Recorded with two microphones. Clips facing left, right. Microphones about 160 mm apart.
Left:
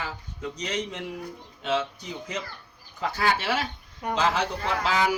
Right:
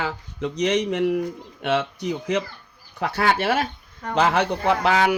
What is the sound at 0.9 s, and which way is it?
A man's voice, 70° right (ahead or behind).